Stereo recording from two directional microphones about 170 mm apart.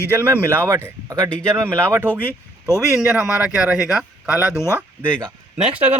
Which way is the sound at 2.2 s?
15° left (ahead or behind).